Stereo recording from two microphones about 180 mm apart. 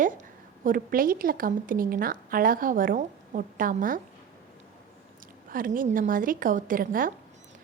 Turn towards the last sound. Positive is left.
turn(degrees=-50)  # may be behind; listen again after turning